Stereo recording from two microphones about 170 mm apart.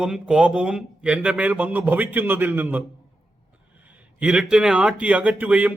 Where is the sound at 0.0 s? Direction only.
5° right (ahead or behind).